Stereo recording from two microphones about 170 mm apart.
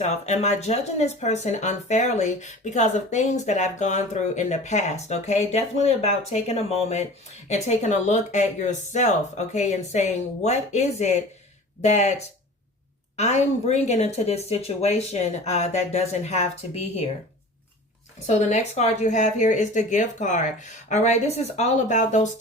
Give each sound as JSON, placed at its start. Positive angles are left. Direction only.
{"t": 0.0, "sound": "speech", "side_deg": 40}
{"t": 13.1, "sound": "speech", "side_deg": 40}
{"t": 18.3, "sound": "speech", "side_deg": 40}